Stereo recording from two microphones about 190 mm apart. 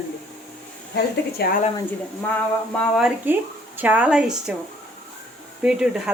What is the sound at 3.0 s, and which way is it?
Speech, 5° right (ahead or behind).